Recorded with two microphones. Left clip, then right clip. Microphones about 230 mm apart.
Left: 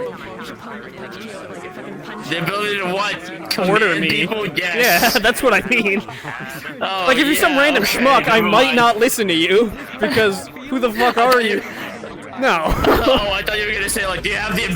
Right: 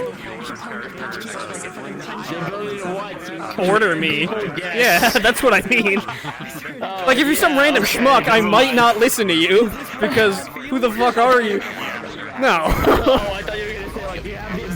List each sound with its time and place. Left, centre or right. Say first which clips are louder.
2.3 s a man's voice: left 8 dB; left
3.6 s a man's voice: even; centre
4.5 s speech: left 5 dB; left
4.8 s a man's voice: right 1 dB; centre
6.8 s a man's voice: left 4 dB; left
7.1 s a man's voice: even; centre
13.2 s a sound: left 5 dB; left
14.1 s music: left 8 dB; left